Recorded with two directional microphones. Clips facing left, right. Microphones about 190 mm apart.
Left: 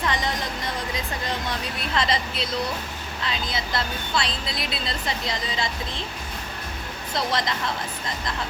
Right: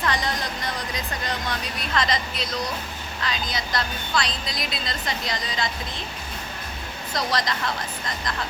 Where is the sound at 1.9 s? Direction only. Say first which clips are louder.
Even; 30° left (ahead or behind).